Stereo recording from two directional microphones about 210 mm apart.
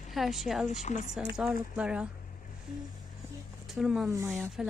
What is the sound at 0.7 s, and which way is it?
Speech, 35° left (ahead or behind).